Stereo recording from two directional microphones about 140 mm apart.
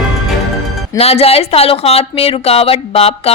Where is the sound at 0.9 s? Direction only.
45° left (ahead or behind).